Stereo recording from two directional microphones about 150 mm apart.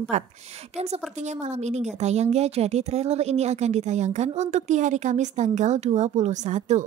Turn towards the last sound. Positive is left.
turn(degrees=-50)  # may be behind; listen again after turning